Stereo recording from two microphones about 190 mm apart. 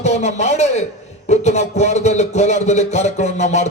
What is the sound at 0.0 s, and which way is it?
A man's voice, 35° left (ahead or behind).